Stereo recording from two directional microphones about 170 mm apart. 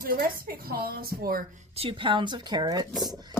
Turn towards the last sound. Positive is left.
turn(degrees=-25)  # may be behind; listen again after turning